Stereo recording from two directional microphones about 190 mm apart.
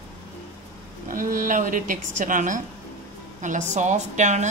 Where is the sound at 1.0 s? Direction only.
45° right (ahead or behind).